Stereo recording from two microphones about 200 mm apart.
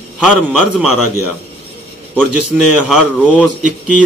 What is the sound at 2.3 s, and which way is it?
Speech, 5° right (ahead or behind).